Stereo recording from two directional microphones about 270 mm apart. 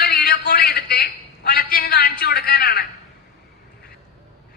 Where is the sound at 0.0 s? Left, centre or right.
Left.